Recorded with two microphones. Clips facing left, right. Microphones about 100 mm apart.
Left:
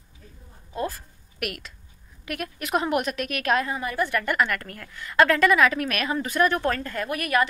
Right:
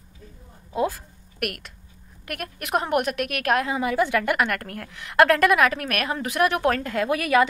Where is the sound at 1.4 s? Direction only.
55° right (ahead or behind); by 7.0 s 90° right.